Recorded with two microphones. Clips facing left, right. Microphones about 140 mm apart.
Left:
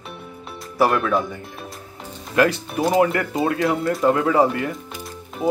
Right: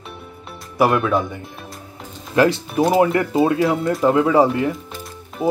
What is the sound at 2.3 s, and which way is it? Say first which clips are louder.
Speech: right 2 dB; 25° right (ahead or behind).